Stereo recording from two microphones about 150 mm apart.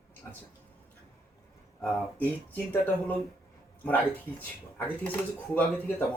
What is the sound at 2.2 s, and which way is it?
Speech, 10° left (ahead or behind).